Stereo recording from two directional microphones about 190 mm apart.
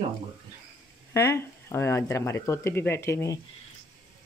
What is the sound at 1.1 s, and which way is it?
Speech, 15° left (ahead or behind).